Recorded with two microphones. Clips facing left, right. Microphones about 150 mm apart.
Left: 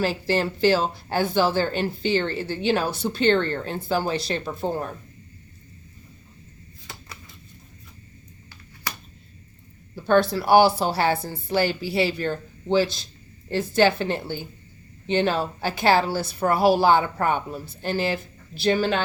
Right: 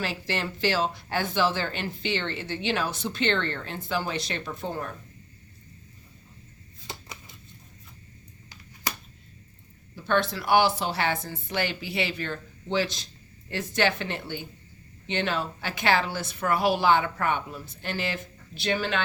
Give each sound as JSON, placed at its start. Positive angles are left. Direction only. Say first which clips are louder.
{"t": 0.0, "sound": "a woman's voice", "louder": "left 7 dB", "side_deg": 35}
{"t": 6.8, "sound": "shuffling cards", "louder": "right 2 dB", "side_deg": -20}
{"t": 9.9, "sound": "a woman's voice", "louder": "left 6 dB", "side_deg": 35}